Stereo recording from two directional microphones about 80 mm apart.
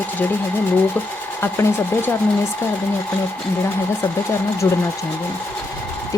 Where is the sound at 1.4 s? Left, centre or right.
Left.